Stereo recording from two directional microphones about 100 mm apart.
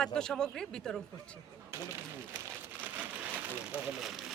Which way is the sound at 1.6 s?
25° right (ahead or behind).